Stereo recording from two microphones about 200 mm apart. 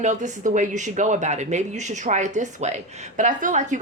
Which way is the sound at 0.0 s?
35° right (ahead or behind).